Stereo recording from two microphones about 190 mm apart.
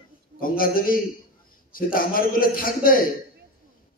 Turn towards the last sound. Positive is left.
turn(degrees=50)  # may be behind; listen again after turning